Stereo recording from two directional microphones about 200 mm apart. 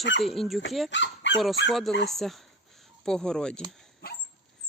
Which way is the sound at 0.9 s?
65° left (ahead or behind).